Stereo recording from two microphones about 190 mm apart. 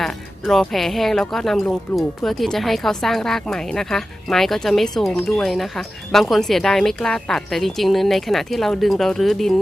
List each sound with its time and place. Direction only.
0.0 s speech: centre (ahead or behind)